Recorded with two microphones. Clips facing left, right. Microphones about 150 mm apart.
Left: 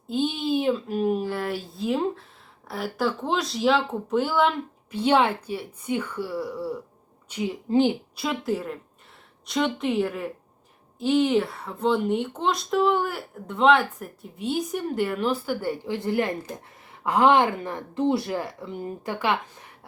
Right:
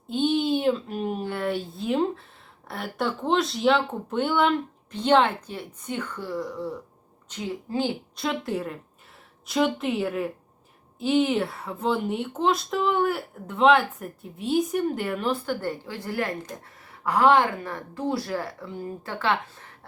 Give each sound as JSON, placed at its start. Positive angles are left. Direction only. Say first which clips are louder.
{"t": 0.1, "sound": "a woman's voice", "louder": "right 2 dB", "side_deg": 0}
{"t": 8.1, "sound": "speech", "louder": "left 1 dB", "side_deg": 5}